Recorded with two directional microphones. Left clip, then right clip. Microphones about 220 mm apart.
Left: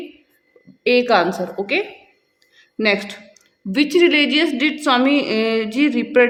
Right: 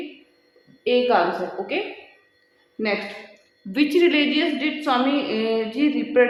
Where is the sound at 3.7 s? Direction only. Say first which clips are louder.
Left 4 dB; 40° left (ahead or behind).